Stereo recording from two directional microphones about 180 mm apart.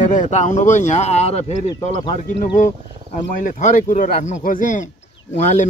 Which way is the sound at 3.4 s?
45° left (ahead or behind).